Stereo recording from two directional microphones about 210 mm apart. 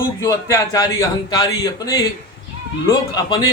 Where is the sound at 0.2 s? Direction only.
15° left (ahead or behind).